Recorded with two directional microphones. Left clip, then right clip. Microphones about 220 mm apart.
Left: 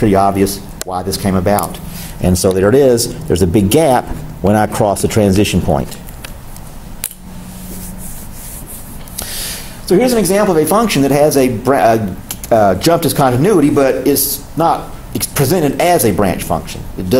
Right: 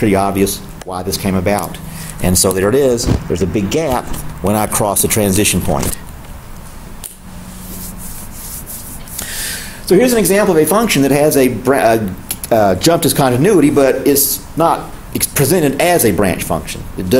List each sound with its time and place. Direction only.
0.0 s speech: 10° left (ahead or behind)
3.3 s speech: 30° left (ahead or behind)
4.5 s speech: 15° left (ahead or behind)
9.2 s speech: centre (ahead or behind)